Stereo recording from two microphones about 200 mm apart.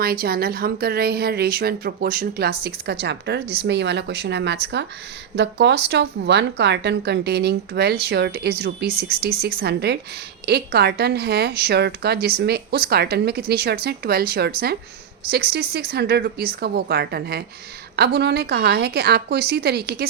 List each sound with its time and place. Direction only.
0.0 s a woman's voice: 50° right (ahead or behind)